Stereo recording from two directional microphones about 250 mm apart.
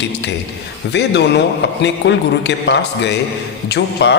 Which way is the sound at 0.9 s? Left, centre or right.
Left.